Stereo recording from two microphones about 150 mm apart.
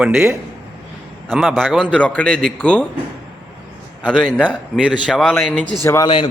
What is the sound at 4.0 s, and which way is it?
A man's voice, 5° left (ahead or behind).